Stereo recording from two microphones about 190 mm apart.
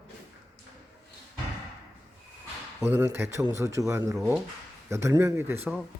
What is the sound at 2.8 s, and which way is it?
Speech, 10° right (ahead or behind).